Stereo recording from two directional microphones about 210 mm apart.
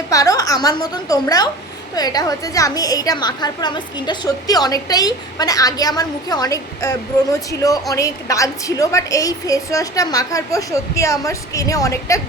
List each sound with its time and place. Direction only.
0.1 s a woman's voice: 15° left (ahead or behind)